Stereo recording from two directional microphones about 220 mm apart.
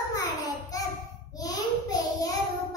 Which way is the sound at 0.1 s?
15° left (ahead or behind).